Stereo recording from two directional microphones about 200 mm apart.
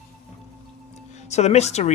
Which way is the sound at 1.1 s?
35° left (ahead or behind).